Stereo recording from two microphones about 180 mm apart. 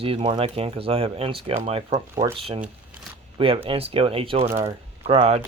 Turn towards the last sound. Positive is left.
turn(degrees=-35)  # may be behind; listen again after turning